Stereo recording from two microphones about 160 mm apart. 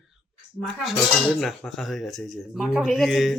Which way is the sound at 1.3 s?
Centre (ahead or behind).